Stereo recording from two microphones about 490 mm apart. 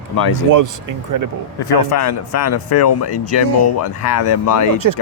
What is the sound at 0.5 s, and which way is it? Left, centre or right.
Speech, right.